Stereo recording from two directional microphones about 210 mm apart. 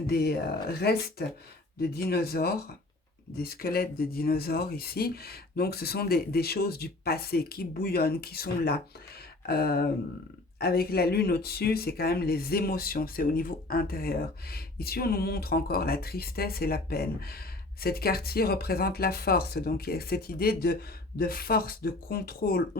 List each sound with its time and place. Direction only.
0.1 s speech: 50° left (ahead or behind)